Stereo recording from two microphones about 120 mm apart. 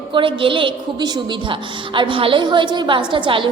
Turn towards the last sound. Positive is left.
turn(degrees=-45)  # may be behind; listen again after turning